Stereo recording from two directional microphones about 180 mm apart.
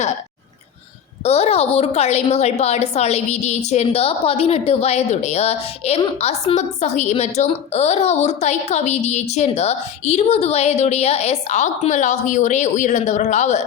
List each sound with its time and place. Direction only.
1.2 s a woman's voice: 35° left (ahead or behind)